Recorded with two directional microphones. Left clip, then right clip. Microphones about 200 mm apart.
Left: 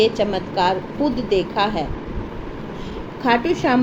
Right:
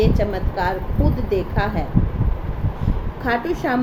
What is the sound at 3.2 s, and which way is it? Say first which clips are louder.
Speech: left 4 dB; 15° right (ahead or behind).